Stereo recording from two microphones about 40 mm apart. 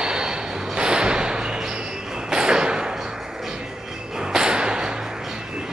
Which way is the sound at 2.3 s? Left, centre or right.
Centre.